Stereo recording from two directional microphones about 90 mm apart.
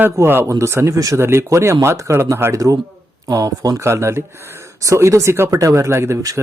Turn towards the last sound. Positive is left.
turn(degrees=-35)  # may be behind; listen again after turning